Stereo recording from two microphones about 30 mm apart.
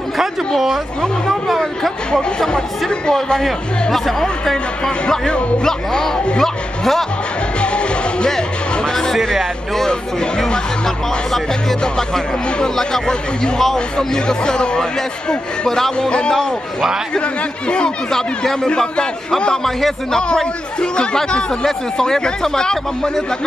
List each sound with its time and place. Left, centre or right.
1.6 s speech: centre
2.5 s speech: left
3.9 s speech: centre
5.6 s speech: left
6.4 s speech: centre
7.6 s music: left
9.3 s speech: centre
12.5 s speech: centre
17.6 s speech: left
18.1 s speech: centre
20.8 s speech: left
21.6 s speech: centre